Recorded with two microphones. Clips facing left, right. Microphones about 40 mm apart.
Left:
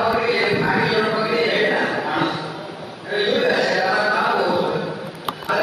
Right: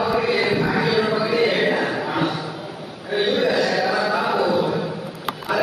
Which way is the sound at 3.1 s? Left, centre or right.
Centre.